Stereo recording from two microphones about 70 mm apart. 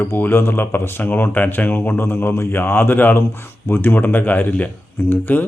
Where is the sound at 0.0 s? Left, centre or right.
Left.